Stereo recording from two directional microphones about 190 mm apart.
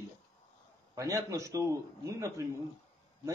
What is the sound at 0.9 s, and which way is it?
A man's voice, 15° right (ahead or behind).